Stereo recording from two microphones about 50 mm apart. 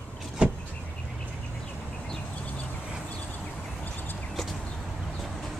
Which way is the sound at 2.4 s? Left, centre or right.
Left.